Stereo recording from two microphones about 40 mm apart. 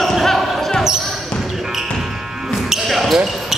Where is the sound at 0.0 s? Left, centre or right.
Centre.